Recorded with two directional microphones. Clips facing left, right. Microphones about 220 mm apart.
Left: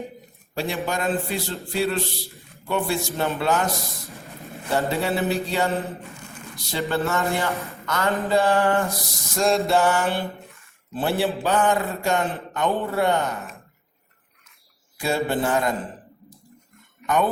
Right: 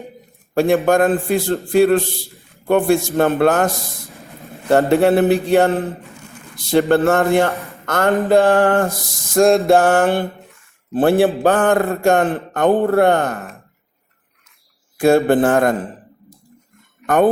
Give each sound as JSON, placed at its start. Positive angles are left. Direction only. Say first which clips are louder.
{"t": 0.5, "sound": "a man's voice", "louder": "right 13 dB", "side_deg": -50}
{"t": 4.7, "sound": "a man's voice", "louder": "right 11 dB", "side_deg": -60}
{"t": 14.9, "sound": "a man's voice", "louder": "right 11 dB", "side_deg": -50}